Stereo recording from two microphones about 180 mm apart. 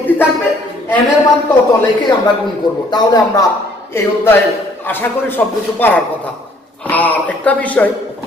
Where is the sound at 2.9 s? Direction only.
20° left (ahead or behind).